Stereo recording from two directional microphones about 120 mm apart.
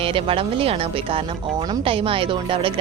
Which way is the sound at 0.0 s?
50° right (ahead or behind).